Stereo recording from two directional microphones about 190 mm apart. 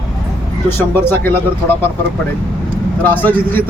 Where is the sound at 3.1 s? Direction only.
10° left (ahead or behind).